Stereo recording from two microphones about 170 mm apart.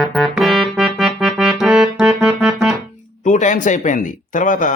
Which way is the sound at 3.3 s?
45° left (ahead or behind).